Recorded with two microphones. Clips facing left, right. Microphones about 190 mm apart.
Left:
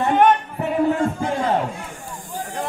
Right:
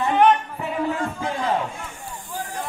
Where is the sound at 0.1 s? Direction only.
55° left (ahead or behind).